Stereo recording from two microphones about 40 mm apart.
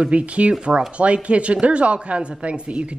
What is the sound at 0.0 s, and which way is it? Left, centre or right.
A woman's voice, right.